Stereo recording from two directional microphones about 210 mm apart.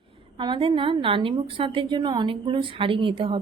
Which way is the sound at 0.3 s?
25° right (ahead or behind).